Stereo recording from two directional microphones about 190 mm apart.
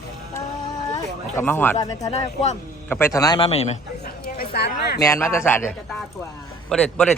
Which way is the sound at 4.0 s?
55° left (ahead or behind).